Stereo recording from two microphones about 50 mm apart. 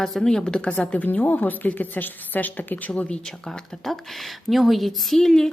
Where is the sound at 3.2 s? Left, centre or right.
Centre.